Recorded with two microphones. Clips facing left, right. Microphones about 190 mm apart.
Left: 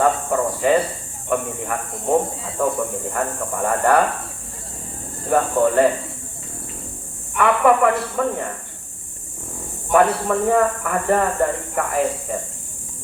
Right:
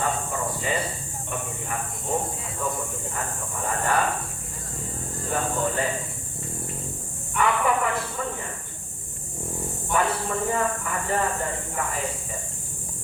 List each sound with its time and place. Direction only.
0.0 s a sound: 60° left (ahead or behind)
1.3 s speech: 60° left (ahead or behind)
2.6 s speech: 75° left (ahead or behind)
3.1 s speech: 55° left (ahead or behind)
5.3 s speech: 60° left (ahead or behind)
7.3 s speech: 65° left (ahead or behind)
9.9 s speech: 55° left (ahead or behind)